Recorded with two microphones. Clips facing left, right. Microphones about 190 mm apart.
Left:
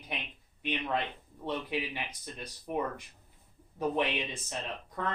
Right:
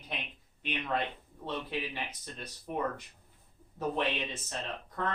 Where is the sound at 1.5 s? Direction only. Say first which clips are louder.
Left 2 dB; 15° left (ahead or behind).